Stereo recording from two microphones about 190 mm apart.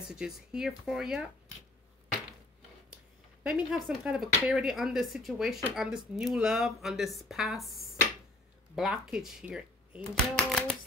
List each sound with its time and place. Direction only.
0.0 s speech: 5° right (ahead or behind)
3.4 s speech: 5° right (ahead or behind)